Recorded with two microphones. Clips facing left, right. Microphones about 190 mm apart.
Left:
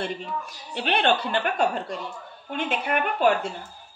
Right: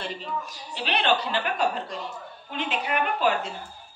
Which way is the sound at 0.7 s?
55° left (ahead or behind).